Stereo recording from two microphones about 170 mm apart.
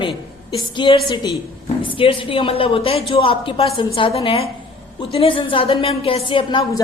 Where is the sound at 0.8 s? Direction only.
25° left (ahead or behind).